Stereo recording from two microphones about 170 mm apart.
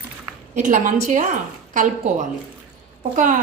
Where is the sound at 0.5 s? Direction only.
45° right (ahead or behind).